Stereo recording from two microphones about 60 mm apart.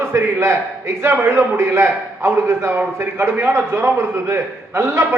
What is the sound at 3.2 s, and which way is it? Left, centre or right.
A man's voice, right.